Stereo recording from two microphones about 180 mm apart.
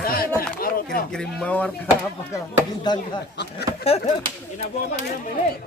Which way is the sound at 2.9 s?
25° left (ahead or behind).